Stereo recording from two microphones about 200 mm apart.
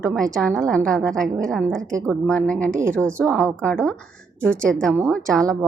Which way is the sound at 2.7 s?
15° right (ahead or behind).